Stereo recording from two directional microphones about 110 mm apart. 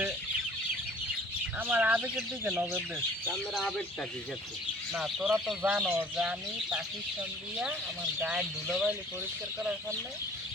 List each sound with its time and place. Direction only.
1.5 s speech: 15° right (ahead or behind)
3.5 s speech: 5° left (ahead or behind)
4.9 s speech: 5° right (ahead or behind)